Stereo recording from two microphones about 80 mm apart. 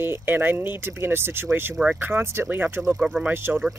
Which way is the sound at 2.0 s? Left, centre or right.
Right.